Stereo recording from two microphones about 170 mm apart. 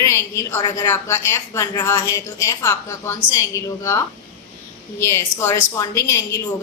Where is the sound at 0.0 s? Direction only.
15° left (ahead or behind).